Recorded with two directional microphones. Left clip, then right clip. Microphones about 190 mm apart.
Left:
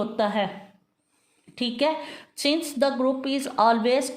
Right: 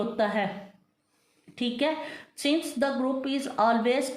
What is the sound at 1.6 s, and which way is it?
A woman's voice, 40° left (ahead or behind).